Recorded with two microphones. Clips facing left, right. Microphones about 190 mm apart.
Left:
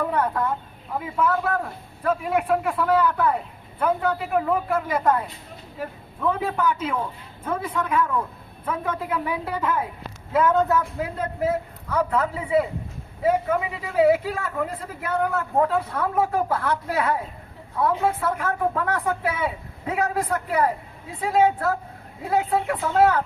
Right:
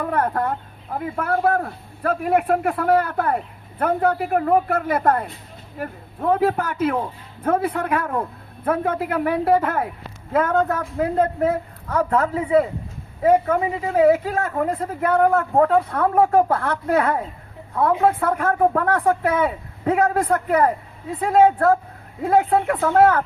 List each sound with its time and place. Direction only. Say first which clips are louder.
0.1 s fowl: right 2 dB; 60° right (ahead or behind)
0.9 s a man's voice: even; 60° right (ahead or behind)
6.3 s a man's voice: right 8 dB; 60° right (ahead or behind)